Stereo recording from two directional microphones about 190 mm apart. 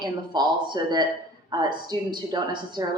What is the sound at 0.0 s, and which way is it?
Speech, 20° right (ahead or behind).